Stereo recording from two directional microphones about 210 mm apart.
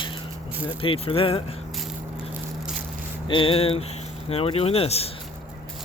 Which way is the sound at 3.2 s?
25° left (ahead or behind).